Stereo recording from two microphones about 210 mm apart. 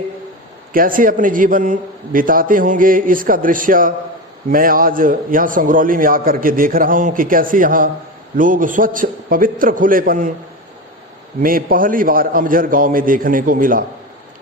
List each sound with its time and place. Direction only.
0.7 s a man's voice: 40° right (ahead or behind)
11.3 s a man's voice: 40° right (ahead or behind)